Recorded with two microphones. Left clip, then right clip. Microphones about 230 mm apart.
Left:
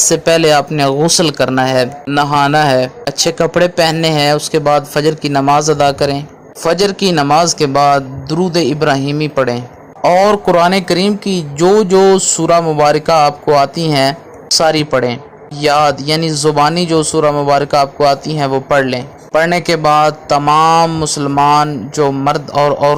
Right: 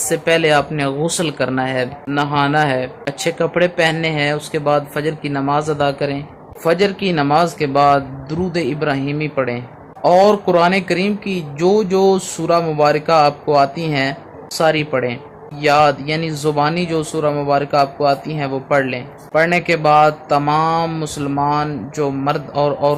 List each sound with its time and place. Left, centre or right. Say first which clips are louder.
0.1 s a man's voice: left 2 dB; left